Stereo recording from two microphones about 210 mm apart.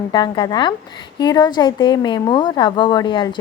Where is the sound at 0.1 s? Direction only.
20° left (ahead or behind).